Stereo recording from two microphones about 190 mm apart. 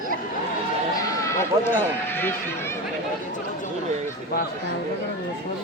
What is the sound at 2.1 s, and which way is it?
Speech, 10° left (ahead or behind).